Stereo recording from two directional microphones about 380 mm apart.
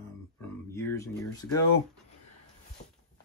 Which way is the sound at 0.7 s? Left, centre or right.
Centre.